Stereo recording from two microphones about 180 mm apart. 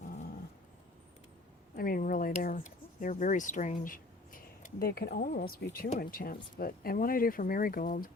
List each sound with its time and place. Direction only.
1.7 s speech: 55° left (ahead or behind)